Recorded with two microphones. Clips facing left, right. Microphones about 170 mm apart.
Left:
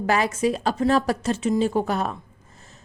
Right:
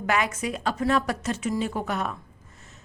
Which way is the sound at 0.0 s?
35° left (ahead or behind).